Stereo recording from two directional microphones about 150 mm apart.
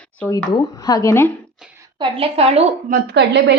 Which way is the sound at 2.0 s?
40° right (ahead or behind).